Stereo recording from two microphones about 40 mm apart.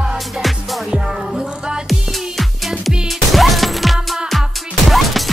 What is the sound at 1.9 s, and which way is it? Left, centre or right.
Music, centre.